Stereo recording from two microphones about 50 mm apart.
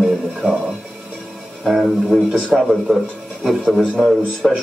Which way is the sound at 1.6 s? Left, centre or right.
Centre.